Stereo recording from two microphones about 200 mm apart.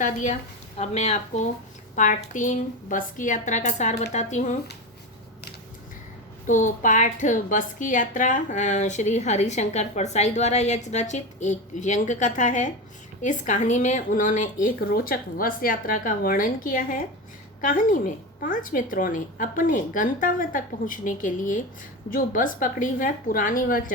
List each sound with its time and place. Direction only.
0.0 s a woman's voice: 40° left (ahead or behind)
6.5 s a woman's voice: 40° left (ahead or behind)